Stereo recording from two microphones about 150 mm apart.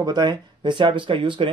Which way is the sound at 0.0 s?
30° right (ahead or behind).